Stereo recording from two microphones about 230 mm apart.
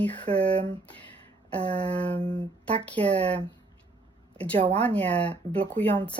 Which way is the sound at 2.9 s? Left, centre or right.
Centre.